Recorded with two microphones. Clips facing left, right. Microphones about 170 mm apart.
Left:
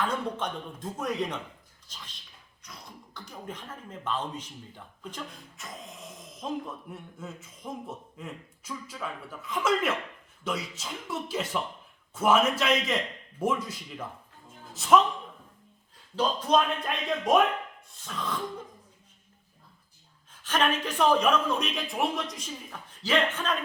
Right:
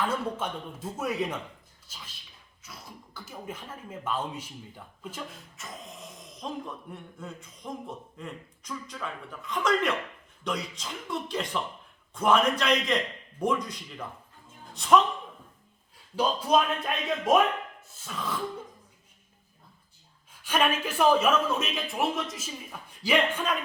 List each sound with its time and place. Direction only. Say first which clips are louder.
0.0 s speech: right 1 dB; 5° right (ahead or behind)
16.1 s speech: even; 10° right (ahead or behind)
20.3 s speech: right 1 dB; 10° right (ahead or behind)